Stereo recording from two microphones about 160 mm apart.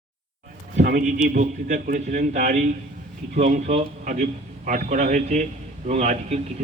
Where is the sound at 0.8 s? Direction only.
55° right (ahead or behind).